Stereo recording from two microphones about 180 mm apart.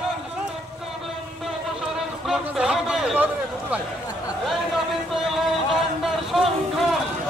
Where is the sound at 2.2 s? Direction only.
5° right (ahead or behind).